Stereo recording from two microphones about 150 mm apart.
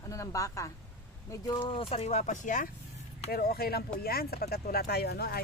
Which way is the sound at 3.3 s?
90° left.